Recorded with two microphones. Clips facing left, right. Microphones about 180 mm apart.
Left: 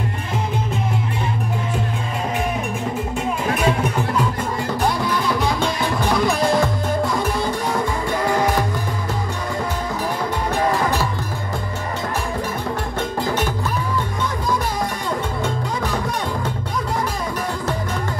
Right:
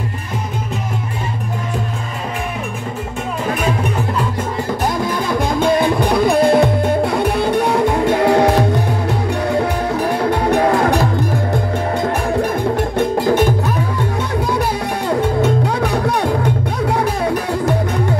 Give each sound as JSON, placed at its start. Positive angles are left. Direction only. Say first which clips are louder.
{"t": 5.0, "sound": "music", "louder": "right 2 dB", "side_deg": -50}
{"t": 15.7, "sound": "music", "louder": "right 6 dB", "side_deg": -65}